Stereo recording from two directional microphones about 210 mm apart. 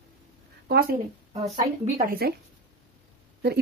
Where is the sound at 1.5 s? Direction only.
30° right (ahead or behind).